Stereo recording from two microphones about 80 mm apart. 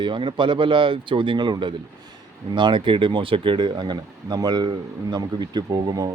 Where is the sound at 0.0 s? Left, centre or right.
Right.